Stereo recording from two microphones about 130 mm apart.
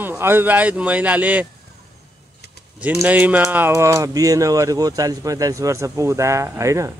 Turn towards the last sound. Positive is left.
turn(degrees=-25)  # may be behind; listen again after turning